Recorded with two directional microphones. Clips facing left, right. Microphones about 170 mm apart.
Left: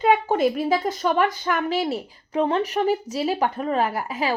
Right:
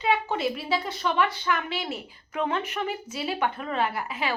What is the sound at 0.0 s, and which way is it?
A woman's voice, 50° left (ahead or behind).